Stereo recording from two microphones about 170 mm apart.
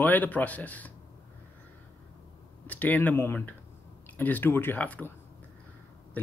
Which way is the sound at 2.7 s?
10° left (ahead or behind).